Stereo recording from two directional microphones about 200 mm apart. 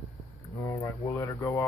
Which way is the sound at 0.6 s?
15° left (ahead or behind).